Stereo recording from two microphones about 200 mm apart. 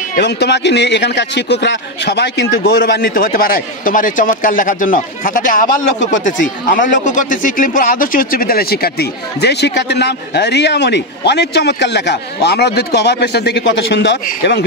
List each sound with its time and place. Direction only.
0.1 s a man's voice: 55° left (ahead or behind)
14.2 s speech: 55° left (ahead or behind)